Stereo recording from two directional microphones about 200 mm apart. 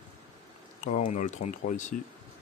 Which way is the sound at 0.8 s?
40° left (ahead or behind).